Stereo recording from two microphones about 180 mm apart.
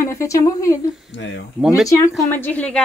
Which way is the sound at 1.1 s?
85° left.